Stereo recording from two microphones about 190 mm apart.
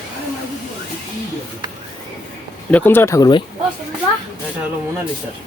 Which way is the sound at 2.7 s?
10° left (ahead or behind).